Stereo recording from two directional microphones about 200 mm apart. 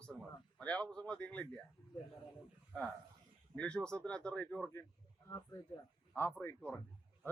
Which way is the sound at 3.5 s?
5° left (ahead or behind).